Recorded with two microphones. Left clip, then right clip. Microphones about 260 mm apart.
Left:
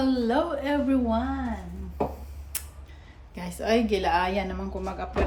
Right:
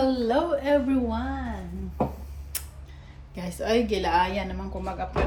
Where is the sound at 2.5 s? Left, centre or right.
Centre.